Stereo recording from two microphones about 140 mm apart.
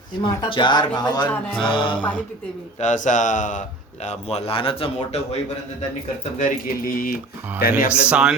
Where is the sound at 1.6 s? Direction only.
35° left (ahead or behind).